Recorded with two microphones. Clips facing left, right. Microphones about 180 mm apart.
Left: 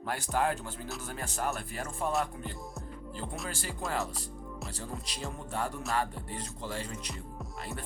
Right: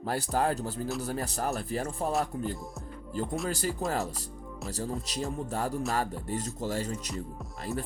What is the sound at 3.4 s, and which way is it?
Speech, 40° right (ahead or behind).